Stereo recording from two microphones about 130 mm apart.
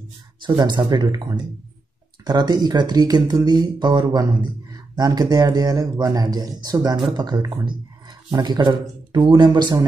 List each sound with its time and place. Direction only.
0.4 s speech: 35° right (ahead or behind)